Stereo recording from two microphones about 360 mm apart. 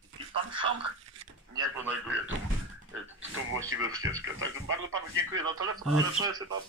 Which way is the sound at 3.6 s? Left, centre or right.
Right.